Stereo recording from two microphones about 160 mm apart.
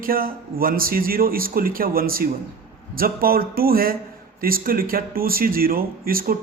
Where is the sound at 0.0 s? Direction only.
65° right (ahead or behind).